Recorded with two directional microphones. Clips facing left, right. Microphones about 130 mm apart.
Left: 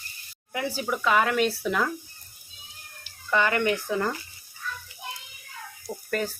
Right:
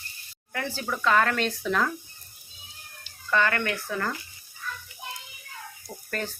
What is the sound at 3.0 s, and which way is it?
Speech, 15° left (ahead or behind).